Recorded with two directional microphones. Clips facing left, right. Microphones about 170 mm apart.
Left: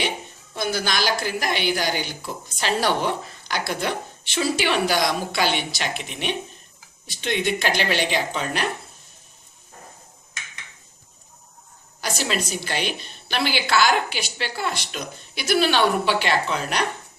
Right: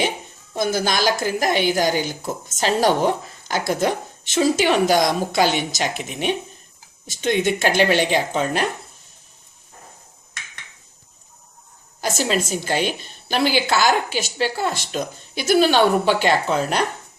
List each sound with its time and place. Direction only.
0.5 s a woman's voice: 45° right (ahead or behind)
12.1 s a woman's voice: 45° right (ahead or behind)